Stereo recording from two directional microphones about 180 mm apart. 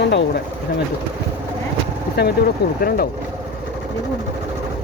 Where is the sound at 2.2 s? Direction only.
65° left (ahead or behind).